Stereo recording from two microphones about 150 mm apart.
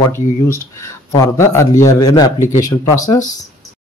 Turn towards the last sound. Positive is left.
turn(degrees=20)  # may be behind; listen again after turning